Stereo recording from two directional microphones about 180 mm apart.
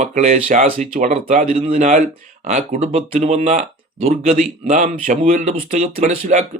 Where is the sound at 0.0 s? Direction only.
40° right (ahead or behind).